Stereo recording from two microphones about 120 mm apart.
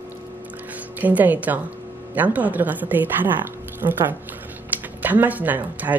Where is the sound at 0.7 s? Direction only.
15° right (ahead or behind).